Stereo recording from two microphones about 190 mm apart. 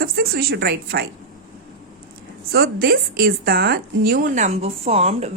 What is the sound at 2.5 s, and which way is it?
A woman's voice, 50° right (ahead or behind).